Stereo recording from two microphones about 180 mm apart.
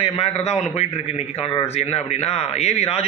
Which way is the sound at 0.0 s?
35° left (ahead or behind).